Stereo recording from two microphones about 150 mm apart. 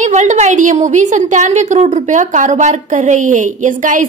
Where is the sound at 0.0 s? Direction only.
50° right (ahead or behind).